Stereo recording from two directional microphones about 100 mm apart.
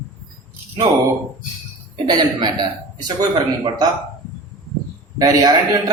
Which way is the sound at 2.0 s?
45° right (ahead or behind).